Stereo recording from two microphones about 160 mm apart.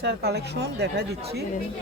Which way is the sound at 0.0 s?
90° right.